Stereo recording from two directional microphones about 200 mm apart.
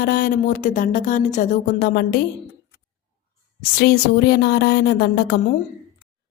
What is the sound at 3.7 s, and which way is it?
Speech, 55° left (ahead or behind).